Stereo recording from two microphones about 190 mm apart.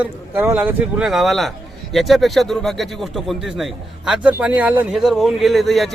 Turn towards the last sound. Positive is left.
turn(degrees=0)  # may be behind; listen again after turning